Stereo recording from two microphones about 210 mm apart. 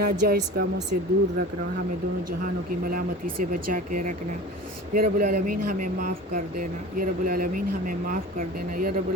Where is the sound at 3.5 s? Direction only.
40° right (ahead or behind).